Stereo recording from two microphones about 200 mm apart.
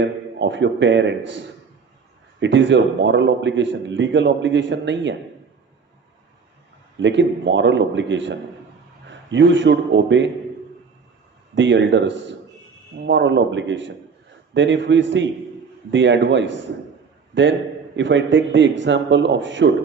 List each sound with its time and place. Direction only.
0.0 s a man's voice: 65° right (ahead or behind)
2.4 s a man's voice: 65° right (ahead or behind)
7.0 s a man's voice: 60° right (ahead or behind)
11.5 s a man's voice: 65° right (ahead or behind)